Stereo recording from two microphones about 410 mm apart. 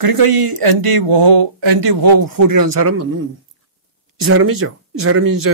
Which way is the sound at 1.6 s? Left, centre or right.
Right.